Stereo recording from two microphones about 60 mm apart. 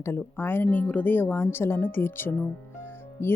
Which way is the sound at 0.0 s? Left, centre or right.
Left.